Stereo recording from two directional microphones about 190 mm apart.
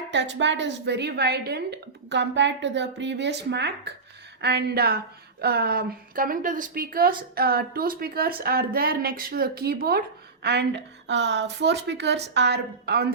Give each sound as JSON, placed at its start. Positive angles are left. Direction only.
{"t": 0.1, "sound": "a woman's voice", "side_deg": -70}